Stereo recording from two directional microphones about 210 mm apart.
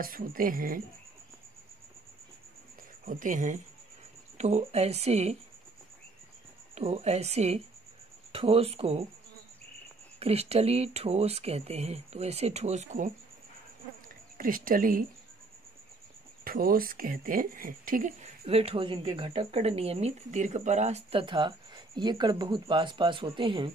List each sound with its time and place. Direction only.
0.0 s speech: 45° right (ahead or behind)
3.1 s speech: 40° right (ahead or behind)
6.7 s speech: 30° right (ahead or behind)
10.1 s speech: 30° right (ahead or behind)
14.3 s speech: 40° right (ahead or behind)
16.4 s speech: 45° right (ahead or behind)
18.4 s speech: 30° right (ahead or behind)